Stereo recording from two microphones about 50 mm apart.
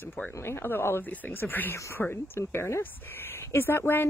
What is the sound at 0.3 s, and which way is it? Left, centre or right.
Speech, left.